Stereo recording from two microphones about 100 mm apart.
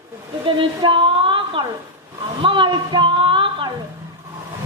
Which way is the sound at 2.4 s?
55° right (ahead or behind).